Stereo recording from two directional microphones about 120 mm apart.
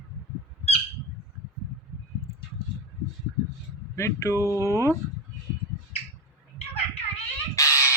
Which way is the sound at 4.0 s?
25° left (ahead or behind).